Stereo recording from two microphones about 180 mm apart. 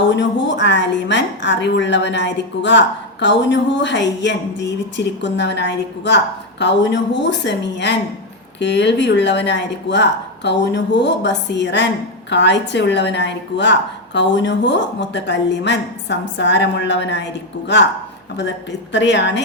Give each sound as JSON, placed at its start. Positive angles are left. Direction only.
{"t": 0.1, "sound": "a woman's voice", "side_deg": 80}
{"t": 18.9, "sound": "a woman's voice", "side_deg": 75}